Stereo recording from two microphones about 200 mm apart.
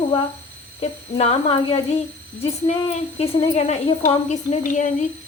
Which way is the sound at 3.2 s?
30° left (ahead or behind).